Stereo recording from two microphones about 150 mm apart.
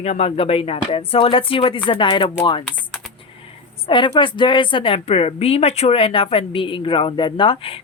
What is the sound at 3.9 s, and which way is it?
A woman's voice, 30° left (ahead or behind).